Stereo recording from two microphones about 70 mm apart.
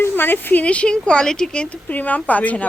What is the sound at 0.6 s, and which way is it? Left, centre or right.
Speech, centre.